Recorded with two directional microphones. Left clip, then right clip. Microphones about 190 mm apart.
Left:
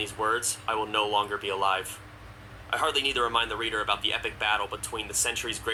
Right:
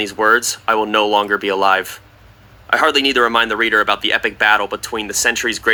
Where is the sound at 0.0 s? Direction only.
50° right (ahead or behind).